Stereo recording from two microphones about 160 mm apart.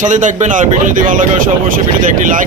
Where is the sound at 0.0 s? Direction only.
50° right (ahead or behind).